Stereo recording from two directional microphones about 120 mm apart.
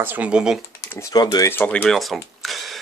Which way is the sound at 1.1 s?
35° left (ahead or behind).